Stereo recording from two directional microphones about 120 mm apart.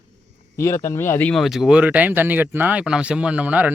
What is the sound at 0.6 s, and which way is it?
Speech, 25° left (ahead or behind).